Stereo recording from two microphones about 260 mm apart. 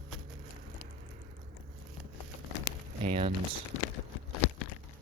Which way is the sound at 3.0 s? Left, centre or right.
Right.